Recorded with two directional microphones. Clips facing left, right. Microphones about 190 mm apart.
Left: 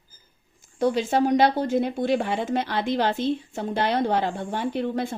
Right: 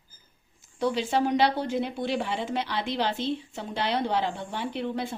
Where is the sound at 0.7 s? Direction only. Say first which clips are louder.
Left 4 dB; 45° left (ahead or behind).